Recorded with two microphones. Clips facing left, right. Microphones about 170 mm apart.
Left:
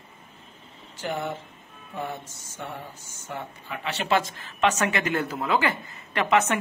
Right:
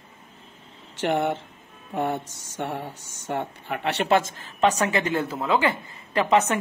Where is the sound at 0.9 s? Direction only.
80° right; by 4.1 s 65° right (ahead or behind).